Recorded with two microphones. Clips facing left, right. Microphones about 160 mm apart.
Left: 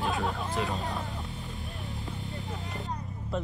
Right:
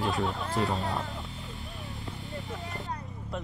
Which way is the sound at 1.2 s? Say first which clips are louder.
Left 2 dB; centre (ahead or behind).